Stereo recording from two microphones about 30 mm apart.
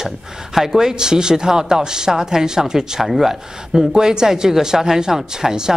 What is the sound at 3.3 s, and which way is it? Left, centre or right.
Speech, centre.